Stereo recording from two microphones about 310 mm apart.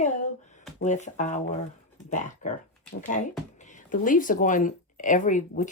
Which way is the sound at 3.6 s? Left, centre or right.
Left.